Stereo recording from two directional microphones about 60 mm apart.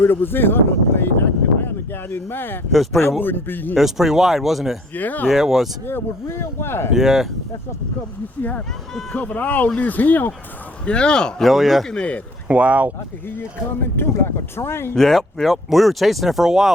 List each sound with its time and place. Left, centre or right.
0.0 s a man's voice: left
3.8 s speech: centre
4.9 s speech: left
5.3 s speech: centre
5.8 s speech: left
6.9 s speech: centre
8.4 s speech: left
10.8 s speech: centre
11.4 s speech: centre
11.9 s speech: centre
12.5 s speech: right
13.2 s a man's voice: left
14.9 s speech: centre